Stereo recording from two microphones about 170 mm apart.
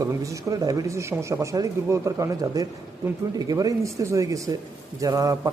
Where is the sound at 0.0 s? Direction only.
20° right (ahead or behind).